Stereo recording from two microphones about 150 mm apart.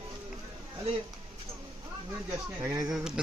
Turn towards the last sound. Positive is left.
turn(degrees=-5)  # may be behind; listen again after turning